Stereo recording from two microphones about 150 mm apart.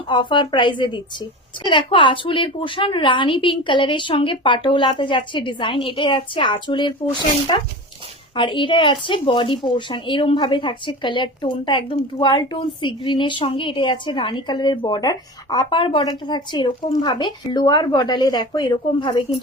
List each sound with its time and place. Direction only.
0.1 s speech: 30° left (ahead or behind)